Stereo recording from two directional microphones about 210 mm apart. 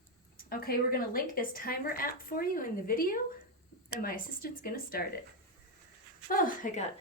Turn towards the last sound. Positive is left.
turn(degrees=35)  # may be behind; listen again after turning